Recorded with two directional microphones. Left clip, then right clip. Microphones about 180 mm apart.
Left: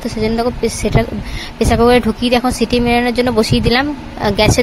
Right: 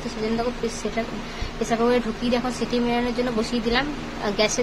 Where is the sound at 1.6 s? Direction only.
45° left (ahead or behind).